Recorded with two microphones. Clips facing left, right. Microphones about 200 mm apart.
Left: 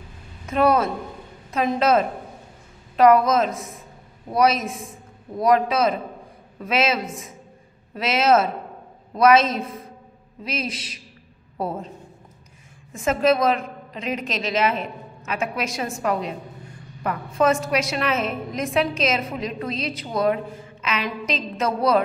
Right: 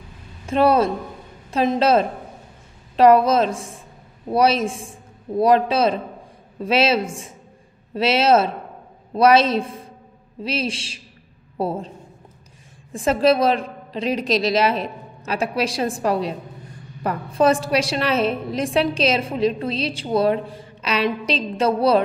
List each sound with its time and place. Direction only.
0.5 s a woman's voice: 30° right (ahead or behind)
12.9 s a woman's voice: 35° right (ahead or behind)